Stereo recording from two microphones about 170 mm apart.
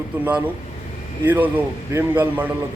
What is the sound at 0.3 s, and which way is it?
A man's voice, 10° right (ahead or behind).